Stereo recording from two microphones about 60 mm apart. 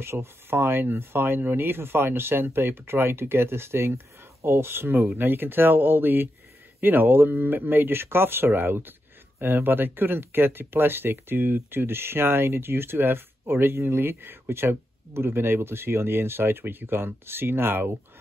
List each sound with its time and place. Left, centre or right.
0.0 s speech: right